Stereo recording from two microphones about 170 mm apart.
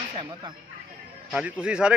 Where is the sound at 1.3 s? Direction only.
5° right (ahead or behind).